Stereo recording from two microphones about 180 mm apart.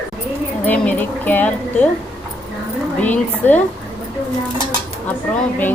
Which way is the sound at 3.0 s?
10° left (ahead or behind).